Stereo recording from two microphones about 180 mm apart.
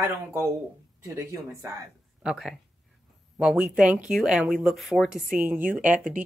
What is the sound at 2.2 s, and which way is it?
Speech, centre (ahead or behind).